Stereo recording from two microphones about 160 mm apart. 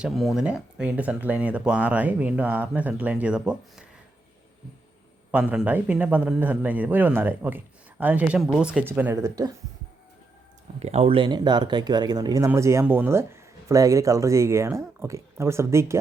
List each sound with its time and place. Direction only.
0.0 s speech: centre (ahead or behind)
5.3 s speech: 5° right (ahead or behind)
10.8 s speech: 40° right (ahead or behind); by 16.0 s 15° right (ahead or behind)